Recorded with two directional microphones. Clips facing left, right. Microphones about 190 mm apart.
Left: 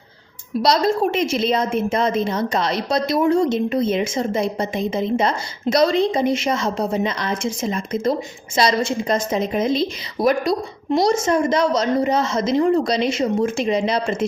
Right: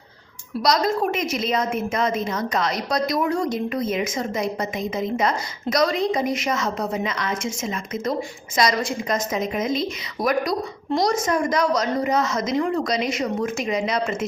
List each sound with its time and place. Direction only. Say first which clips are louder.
0.6 s a woman's voice: left 3 dB; 30° left (ahead or behind)